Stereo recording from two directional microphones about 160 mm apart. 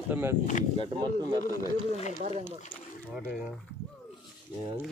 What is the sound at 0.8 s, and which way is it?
Speech, 30° right (ahead or behind).